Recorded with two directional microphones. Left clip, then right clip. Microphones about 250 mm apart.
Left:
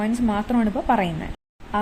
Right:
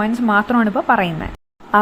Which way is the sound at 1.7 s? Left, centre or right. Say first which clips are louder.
Right 10 dB; centre.